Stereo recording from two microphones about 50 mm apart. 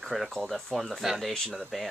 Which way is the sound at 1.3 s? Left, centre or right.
Centre.